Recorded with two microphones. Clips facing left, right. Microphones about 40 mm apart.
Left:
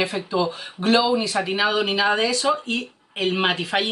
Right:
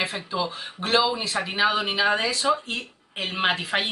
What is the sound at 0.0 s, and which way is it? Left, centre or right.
Speech, centre.